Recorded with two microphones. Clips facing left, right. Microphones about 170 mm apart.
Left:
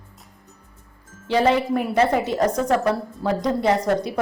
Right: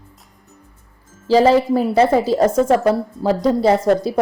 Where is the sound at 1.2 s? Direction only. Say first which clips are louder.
Right 6 dB; 35° right (ahead or behind).